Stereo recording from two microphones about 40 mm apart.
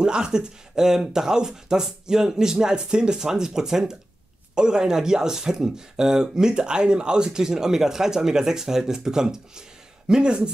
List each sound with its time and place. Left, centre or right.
0.0 s speech: centre